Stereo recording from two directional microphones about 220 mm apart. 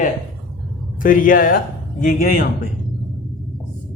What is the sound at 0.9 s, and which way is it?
Speech, 40° left (ahead or behind).